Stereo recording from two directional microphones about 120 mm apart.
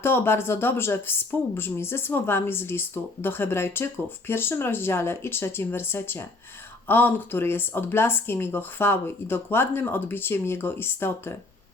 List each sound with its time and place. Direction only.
0.0 s speech: 20° left (ahead or behind)